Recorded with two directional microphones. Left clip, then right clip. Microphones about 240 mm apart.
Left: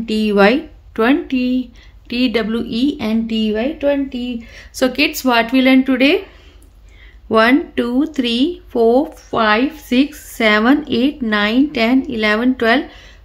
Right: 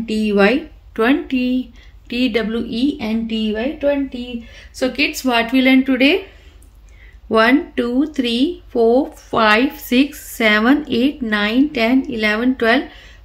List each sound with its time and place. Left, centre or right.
0.0 s speech: left
7.2 s speech: centre
9.3 s a woman's voice: centre